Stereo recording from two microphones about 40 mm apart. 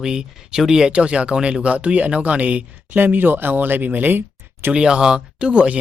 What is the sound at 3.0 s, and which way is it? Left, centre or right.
Speech, right.